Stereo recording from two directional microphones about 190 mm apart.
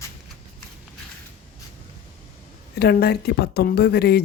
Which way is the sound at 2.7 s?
55° left (ahead or behind).